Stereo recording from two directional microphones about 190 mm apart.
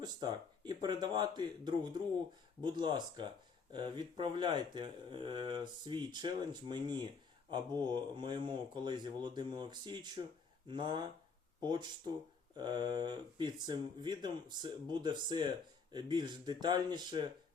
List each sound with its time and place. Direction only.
0.0 s speech: 20° right (ahead or behind)